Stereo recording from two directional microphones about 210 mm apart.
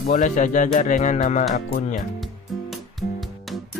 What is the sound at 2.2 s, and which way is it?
Music, centre (ahead or behind).